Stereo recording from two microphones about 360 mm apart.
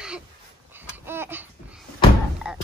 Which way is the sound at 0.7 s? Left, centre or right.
Centre.